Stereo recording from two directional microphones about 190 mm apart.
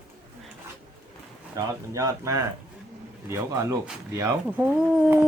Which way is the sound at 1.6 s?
15° right (ahead or behind).